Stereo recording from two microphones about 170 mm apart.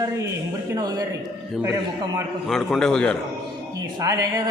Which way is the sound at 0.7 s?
25° right (ahead or behind).